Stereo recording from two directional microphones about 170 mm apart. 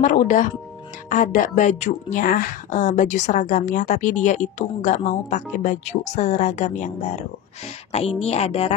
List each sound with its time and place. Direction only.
0.0 s a woman's voice: 50° left (ahead or behind)
2.1 s a woman's voice: 55° left (ahead or behind); by 8.7 s 35° left (ahead or behind)